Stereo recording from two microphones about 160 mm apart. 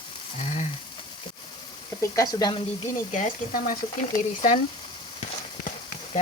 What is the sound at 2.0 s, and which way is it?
Speech, 20° left (ahead or behind).